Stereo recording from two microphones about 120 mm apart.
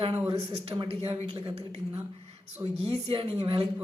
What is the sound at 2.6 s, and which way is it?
Speech, 30° right (ahead or behind).